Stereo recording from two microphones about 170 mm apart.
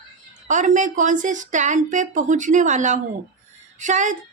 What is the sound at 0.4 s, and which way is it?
A woman's voice, 45° right (ahead or behind).